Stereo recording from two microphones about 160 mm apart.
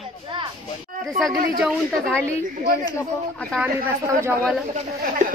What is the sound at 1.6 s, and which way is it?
Speech, centre (ahead or behind).